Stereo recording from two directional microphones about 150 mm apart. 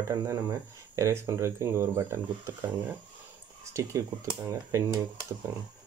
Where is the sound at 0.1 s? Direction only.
20° right (ahead or behind).